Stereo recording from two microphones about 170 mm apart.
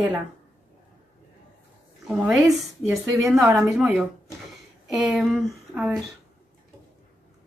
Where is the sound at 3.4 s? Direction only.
5° right (ahead or behind).